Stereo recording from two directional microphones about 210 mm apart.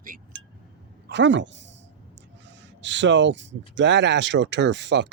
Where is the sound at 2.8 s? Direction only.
60° right (ahead or behind).